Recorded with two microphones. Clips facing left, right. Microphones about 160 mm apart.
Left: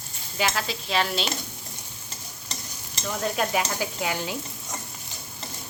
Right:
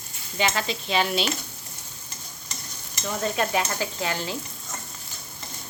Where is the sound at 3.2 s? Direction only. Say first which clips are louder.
Right 1 dB; 5° left (ahead or behind).